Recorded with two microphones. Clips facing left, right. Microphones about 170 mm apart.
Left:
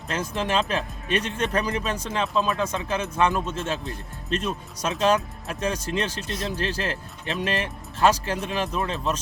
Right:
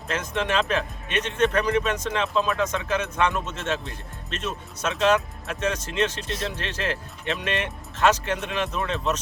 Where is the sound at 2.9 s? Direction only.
30° left (ahead or behind).